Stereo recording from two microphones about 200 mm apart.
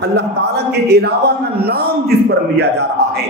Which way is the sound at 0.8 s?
55° right (ahead or behind).